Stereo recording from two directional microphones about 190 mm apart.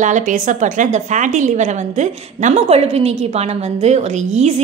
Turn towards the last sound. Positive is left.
turn(degrees=-35)  # may be behind; listen again after turning